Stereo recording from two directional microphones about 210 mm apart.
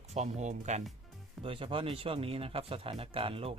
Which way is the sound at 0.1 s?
30° right (ahead or behind).